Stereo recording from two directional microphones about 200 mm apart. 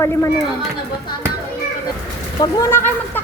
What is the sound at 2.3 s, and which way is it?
Speech, 20° left (ahead or behind).